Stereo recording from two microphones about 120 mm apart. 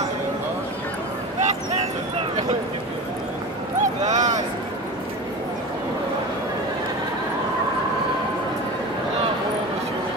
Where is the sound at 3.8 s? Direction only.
90° right.